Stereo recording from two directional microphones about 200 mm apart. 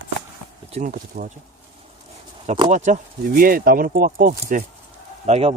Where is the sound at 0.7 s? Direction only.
40° right (ahead or behind).